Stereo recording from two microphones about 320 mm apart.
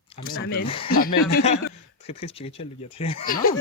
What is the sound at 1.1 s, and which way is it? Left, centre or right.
Speech, left.